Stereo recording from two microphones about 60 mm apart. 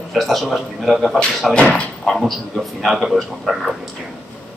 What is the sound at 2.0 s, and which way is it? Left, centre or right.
Speech, centre.